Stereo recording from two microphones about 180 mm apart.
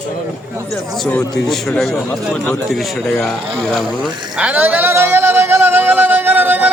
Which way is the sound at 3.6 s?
Centre (ahead or behind).